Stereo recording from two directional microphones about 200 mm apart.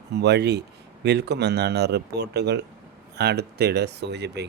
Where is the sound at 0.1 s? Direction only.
55° right (ahead or behind).